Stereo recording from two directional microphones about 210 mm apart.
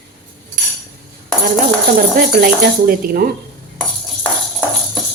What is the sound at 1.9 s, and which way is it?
Cutlery, 45° right (ahead or behind).